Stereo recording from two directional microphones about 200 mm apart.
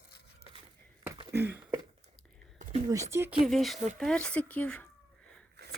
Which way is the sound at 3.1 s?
10° right (ahead or behind).